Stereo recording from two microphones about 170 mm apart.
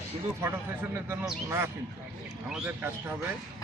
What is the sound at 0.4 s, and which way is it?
A man's voice, 15° right (ahead or behind).